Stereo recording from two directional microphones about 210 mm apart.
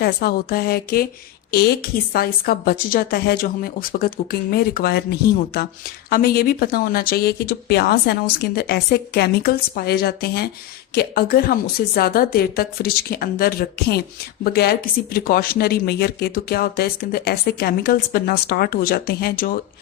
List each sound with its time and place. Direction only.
0.0 s speech: 45° left (ahead or behind)
6.1 s speech: 45° left (ahead or behind)